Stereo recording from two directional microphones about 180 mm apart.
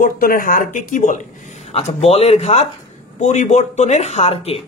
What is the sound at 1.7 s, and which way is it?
Speech, 35° left (ahead or behind).